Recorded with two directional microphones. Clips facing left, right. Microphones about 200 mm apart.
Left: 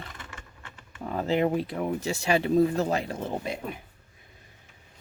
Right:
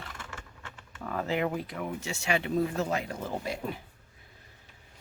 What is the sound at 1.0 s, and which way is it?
Speech, 30° left (ahead or behind).